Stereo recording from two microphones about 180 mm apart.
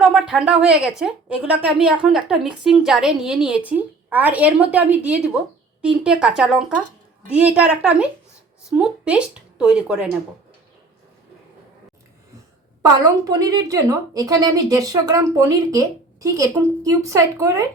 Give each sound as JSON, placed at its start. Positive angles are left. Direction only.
{"t": 0.0, "sound": "a woman's voice", "side_deg": -5}
{"t": 12.8, "sound": "a woman's voice", "side_deg": -20}